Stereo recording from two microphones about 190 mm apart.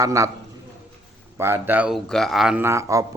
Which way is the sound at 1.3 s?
10° right (ahead or behind).